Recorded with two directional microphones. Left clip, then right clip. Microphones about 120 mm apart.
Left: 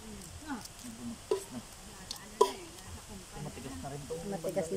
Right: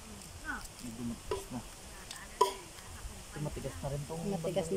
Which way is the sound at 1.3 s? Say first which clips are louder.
Left 5 dB; 30° left (ahead or behind).